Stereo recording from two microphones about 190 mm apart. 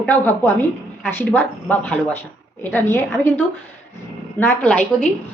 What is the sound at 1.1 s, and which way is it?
Speech, 10° left (ahead or behind).